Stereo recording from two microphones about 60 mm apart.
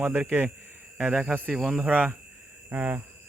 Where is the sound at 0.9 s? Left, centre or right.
Centre.